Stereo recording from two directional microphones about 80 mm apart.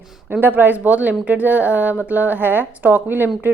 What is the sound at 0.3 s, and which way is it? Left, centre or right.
A woman's voice, right.